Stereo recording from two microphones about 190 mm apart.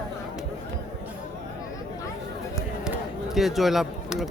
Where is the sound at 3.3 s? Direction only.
Centre (ahead or behind).